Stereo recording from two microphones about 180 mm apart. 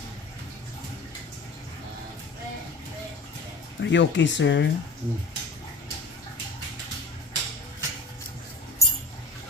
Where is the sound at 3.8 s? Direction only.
90° left.